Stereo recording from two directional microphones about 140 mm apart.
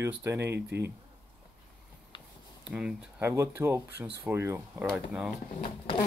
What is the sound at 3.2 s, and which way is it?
Speech, 15° right (ahead or behind).